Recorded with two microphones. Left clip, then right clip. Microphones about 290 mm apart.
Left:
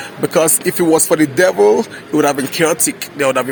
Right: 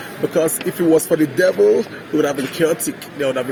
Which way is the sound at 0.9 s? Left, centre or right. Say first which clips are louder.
Left 2 dB; left.